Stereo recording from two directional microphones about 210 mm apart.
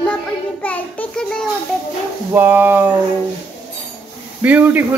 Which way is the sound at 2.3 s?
10° right (ahead or behind).